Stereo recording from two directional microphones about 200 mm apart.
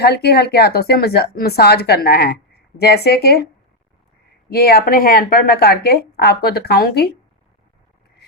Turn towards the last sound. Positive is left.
turn(degrees=50)  # may be behind; listen again after turning